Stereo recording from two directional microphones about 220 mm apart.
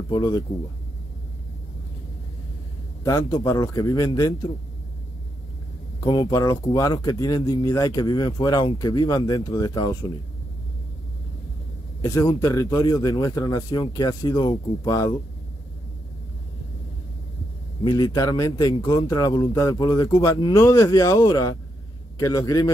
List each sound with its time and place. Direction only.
0.1 s speech: 20° left (ahead or behind)
3.0 s speech: 15° left (ahead or behind)
6.0 s speech: 15° left (ahead or behind)
12.0 s speech: 15° left (ahead or behind)
17.8 s speech: 20° left (ahead or behind)